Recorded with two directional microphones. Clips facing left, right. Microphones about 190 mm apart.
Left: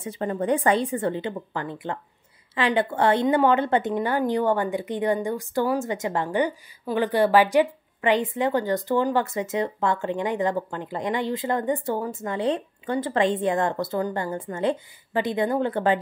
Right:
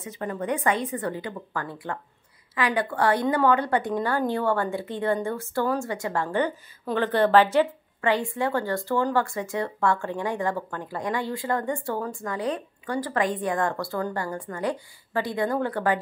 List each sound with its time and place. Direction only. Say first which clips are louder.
0.0 s a woman's voice: left 4 dB; 30° left (ahead or behind)